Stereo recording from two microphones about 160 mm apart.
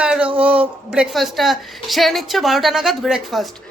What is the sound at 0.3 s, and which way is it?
Speech, 10° right (ahead or behind).